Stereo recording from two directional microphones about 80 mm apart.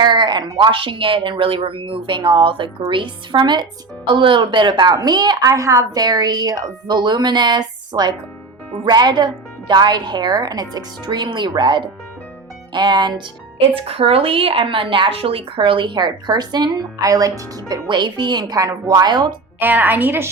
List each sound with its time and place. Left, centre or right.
0.0 s speech: right
4.9 s a woman's voice: right
5.5 s a woman's voice: right
14.5 s a woman's voice: right
17.1 s speech: right
17.8 s a woman's voice: right
19.5 s a woman's voice: right